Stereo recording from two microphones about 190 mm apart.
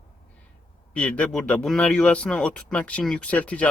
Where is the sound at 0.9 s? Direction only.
5° left (ahead or behind).